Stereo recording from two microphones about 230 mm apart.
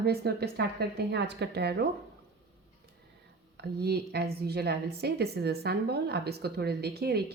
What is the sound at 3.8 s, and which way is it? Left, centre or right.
A woman's voice, right.